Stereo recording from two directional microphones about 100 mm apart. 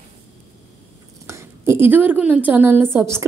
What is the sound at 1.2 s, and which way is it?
A woman's voice, 30° right (ahead or behind).